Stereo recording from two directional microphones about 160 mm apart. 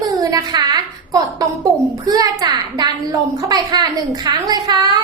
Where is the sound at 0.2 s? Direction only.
25° right (ahead or behind).